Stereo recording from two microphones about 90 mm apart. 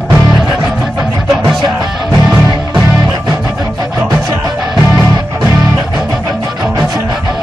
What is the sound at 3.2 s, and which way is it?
Music, 25° right (ahead or behind).